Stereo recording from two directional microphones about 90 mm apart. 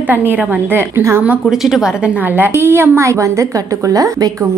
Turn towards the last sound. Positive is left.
turn(degrees=-40)  # may be behind; listen again after turning